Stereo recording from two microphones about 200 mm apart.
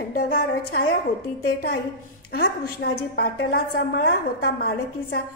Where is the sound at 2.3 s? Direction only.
50° left (ahead or behind).